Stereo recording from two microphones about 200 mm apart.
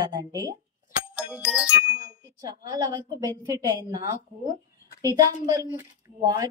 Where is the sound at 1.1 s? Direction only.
5° right (ahead or behind).